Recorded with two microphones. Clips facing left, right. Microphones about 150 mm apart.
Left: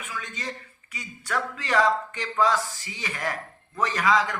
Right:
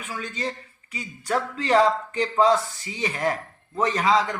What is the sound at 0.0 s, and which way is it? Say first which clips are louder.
A man's voice: right 5 dB; 35° right (ahead or behind).